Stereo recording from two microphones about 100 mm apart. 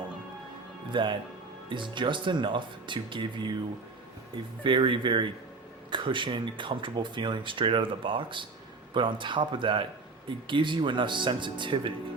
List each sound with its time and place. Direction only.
0.9 s speech: 55° right (ahead or behind)
4.6 s speech: 55° right (ahead or behind)